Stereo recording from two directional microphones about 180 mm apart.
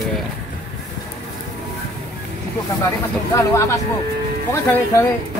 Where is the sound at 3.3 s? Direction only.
15° left (ahead or behind).